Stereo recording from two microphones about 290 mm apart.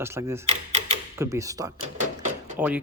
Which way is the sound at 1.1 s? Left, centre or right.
Centre.